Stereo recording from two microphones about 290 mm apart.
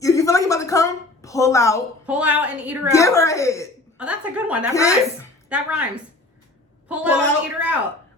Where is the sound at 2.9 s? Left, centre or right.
Centre.